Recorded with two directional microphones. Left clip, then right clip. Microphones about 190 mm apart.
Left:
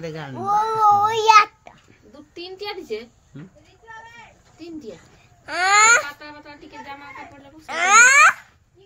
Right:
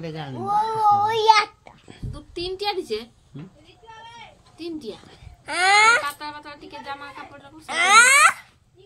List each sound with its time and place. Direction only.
0.0 s a child's voice: 10° left (ahead or behind)
1.9 s a sound: 65° right (ahead or behind)
4.6 s a woman's voice: 65° right (ahead or behind)
5.4 s baby cry: 15° right (ahead or behind)
6.1 s a woman's voice: 60° right (ahead or behind)
7.6 s a child's voice: 5° right (ahead or behind)